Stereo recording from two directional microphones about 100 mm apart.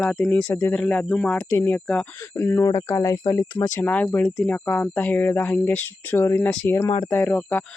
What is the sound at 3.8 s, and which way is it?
Speech, 15° left (ahead or behind).